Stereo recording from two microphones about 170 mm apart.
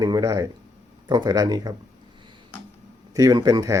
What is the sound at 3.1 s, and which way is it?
Speech, 20° right (ahead or behind).